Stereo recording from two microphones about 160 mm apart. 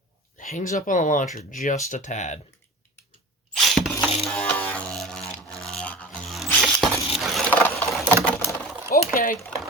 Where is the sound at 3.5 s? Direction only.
Centre (ahead or behind).